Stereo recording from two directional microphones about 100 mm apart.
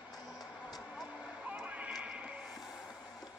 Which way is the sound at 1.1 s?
15° right (ahead or behind).